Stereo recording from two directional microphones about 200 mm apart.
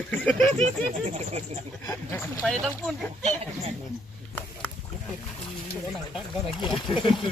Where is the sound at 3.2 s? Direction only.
30° right (ahead or behind).